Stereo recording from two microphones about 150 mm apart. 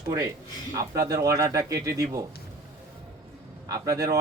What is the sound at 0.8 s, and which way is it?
Speech, 20° right (ahead or behind).